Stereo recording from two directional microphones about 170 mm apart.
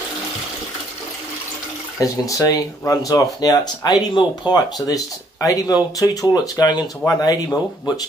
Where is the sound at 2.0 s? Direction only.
20° left (ahead or behind).